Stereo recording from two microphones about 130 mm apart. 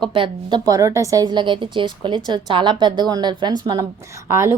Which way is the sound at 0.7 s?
25° right (ahead or behind).